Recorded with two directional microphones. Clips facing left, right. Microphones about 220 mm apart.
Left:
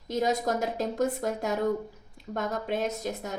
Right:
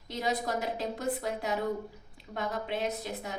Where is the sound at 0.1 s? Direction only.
45° left (ahead or behind).